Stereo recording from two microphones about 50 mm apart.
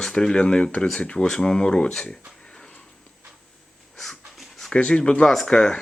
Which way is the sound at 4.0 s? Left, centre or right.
Centre.